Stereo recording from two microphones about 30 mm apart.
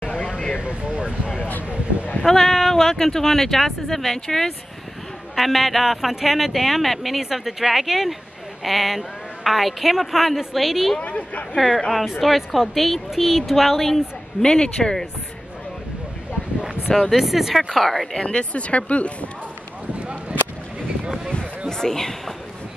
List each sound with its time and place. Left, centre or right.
0.6 s speech: right
2.2 s a woman's voice: centre
5.3 s a woman's voice: centre
6.5 s a woman's voice: centre
7.1 s a woman's voice: centre
11.0 s speech: left
11.5 s a woman's voice: centre
14.4 s speech: left
17.1 s speech: centre
17.7 s speech: centre
18.2 s speech: left
20.0 s a sound: right
21.6 s a sound: centre